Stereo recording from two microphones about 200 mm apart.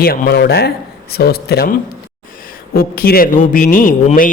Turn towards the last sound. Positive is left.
turn(degrees=45)  # may be behind; listen again after turning